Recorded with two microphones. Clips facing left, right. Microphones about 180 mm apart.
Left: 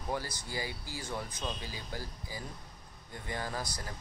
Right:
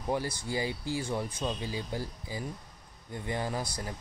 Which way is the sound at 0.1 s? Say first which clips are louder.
Right 6 dB; 20° right (ahead or behind).